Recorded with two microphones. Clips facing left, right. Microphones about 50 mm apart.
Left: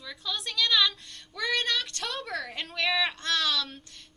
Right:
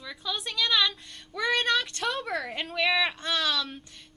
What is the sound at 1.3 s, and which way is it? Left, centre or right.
Child singing, centre.